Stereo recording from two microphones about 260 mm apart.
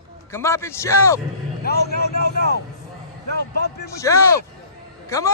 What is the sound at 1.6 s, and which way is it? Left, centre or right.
A man's voice, left.